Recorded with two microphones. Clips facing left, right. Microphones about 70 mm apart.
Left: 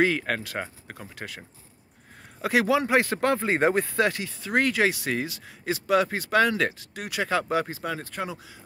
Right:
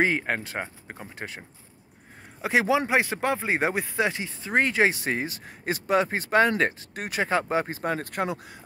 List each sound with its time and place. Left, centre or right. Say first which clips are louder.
0.0 s speech: left 1 dB; right
2.4 s speech: even; right